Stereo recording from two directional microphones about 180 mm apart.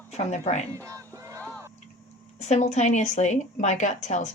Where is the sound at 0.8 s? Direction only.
15° right (ahead or behind).